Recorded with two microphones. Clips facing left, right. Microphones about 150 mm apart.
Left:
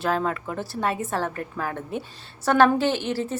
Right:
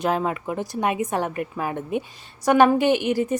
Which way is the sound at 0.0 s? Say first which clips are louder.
Right 2 dB; 15° right (ahead or behind).